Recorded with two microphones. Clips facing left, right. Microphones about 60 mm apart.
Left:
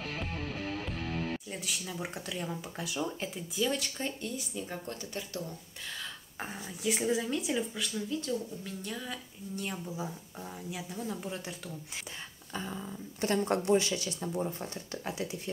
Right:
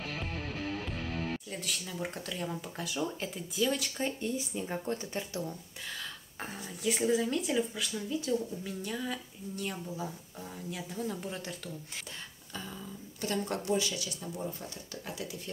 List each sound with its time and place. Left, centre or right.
1.5 s speech: centre
4.0 s speech: centre
6.4 s speech: centre
13.2 s speech: left